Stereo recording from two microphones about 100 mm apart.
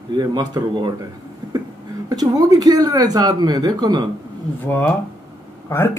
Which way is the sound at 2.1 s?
40° right (ahead or behind).